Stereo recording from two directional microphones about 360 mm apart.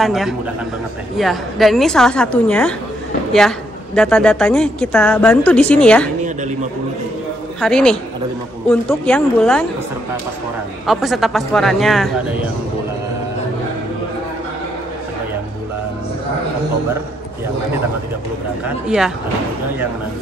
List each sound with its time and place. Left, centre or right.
0.0 s a woman's voice: centre
6.2 s a man's voice: centre
7.6 s a woman's voice: centre
10.9 s a woman's voice: centre
18.9 s a woman's voice: centre